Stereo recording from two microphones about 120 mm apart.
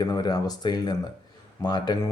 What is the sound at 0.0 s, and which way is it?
Speech, 35° left (ahead or behind).